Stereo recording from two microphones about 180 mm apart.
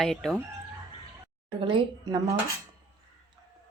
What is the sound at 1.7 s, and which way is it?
Speech, 25° right (ahead or behind).